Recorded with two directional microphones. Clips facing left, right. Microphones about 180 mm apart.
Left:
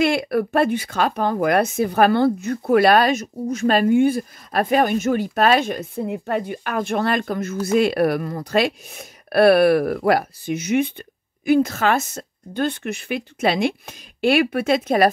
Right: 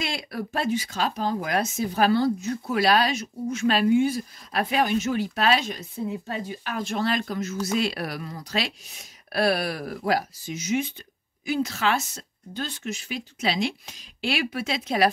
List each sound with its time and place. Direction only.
0.0 s speech: 60° left (ahead or behind)